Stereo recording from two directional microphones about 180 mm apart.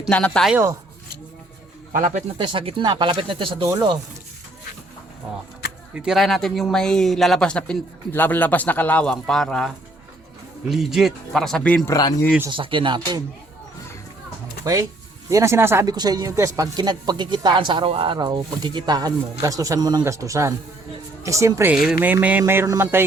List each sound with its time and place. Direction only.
0.1 s speech: 5° left (ahead or behind)
0.5 s speech: 15° right (ahead or behind)
1.9 s speech: 45° right (ahead or behind)
2.4 s speech: 30° right (ahead or behind)
3.7 s speech: 20° right (ahead or behind)
5.9 s speech: 5° right (ahead or behind)
12.5 s speech: 25° right (ahead or behind)
14.6 s speech: 20° right (ahead or behind)